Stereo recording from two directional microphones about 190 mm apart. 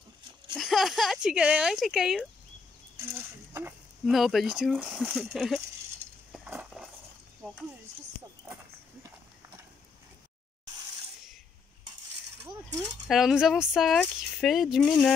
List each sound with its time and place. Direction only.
0.6 s speech: centre (ahead or behind)
3.1 s a sound: 15° right (ahead or behind)
4.0 s speech: centre (ahead or behind)
6.3 s dishes: 5° right (ahead or behind)
12.4 s speech: 20° right (ahead or behind)
13.1 s speech: 5° right (ahead or behind)